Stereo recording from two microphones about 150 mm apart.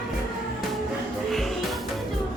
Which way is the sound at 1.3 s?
Centre (ahead or behind).